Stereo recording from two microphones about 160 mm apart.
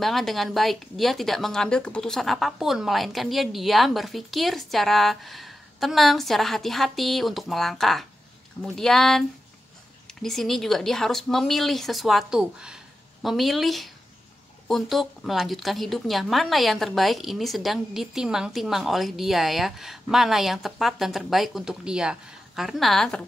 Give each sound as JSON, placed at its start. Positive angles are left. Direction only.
{"t": 0.0, "sound": "a woman's voice", "side_deg": 0}